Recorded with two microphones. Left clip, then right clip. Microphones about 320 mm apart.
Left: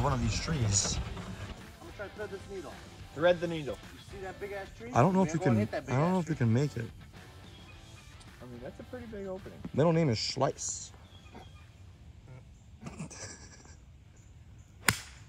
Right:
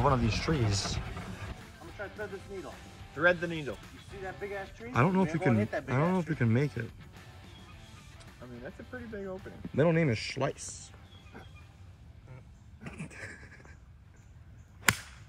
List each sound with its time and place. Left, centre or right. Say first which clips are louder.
0.0 s speech: right 4 dB; centre
3.2 s speech: even; left
4.2 s speech: right 1 dB; centre
9.1 s speech: even; left
9.8 s speech: even; centre
11.3 s vehicle: right 1 dB; left
12.9 s a sound: right 2 dB; centre
14.8 s a sound: right 2 dB; centre